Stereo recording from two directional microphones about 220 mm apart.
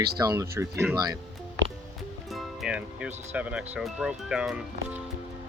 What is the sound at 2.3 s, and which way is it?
Speech, centre (ahead or behind).